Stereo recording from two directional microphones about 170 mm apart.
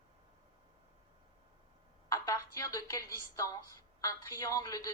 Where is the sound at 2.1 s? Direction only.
20° left (ahead or behind).